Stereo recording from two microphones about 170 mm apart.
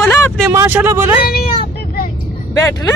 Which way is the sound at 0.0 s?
15° left (ahead or behind).